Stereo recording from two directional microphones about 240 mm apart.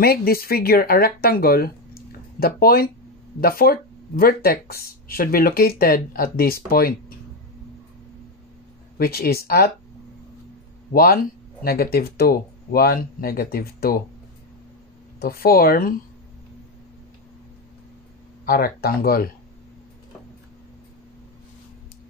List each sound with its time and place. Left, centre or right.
0.0 s speech: left
8.9 s speech: left
10.9 s a man's voice: left
15.1 s speech: left
18.4 s speech: left